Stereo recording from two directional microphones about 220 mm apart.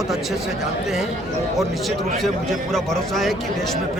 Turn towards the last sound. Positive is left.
turn(degrees=0)  # may be behind; listen again after turning